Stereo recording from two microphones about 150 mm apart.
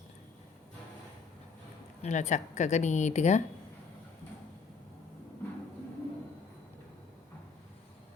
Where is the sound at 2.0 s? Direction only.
50° left (ahead or behind).